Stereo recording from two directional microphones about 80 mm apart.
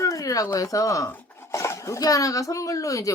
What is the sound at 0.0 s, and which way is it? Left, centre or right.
Speech, left.